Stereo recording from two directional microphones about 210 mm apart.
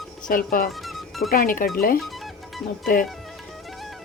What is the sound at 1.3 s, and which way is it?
Speech, 40° left (ahead or behind).